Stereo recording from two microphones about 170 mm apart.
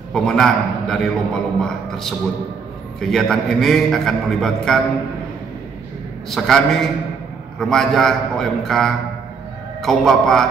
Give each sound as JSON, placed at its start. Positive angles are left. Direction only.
{"t": 0.1, "sound": "a man's voice", "side_deg": 5}
{"t": 6.3, "sound": "a man's voice", "side_deg": 0}